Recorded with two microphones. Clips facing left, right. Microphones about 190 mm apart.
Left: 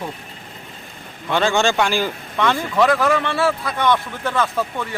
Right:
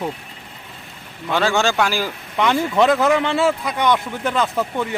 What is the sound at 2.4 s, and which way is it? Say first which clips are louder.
Speech: right 1 dB; 20° right (ahead or behind).